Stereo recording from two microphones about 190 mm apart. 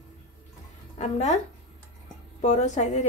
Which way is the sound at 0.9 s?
35° left (ahead or behind).